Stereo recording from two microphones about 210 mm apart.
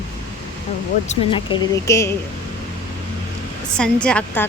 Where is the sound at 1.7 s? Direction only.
15° left (ahead or behind).